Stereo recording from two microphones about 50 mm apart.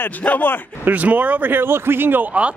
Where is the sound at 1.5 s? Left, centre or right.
Right.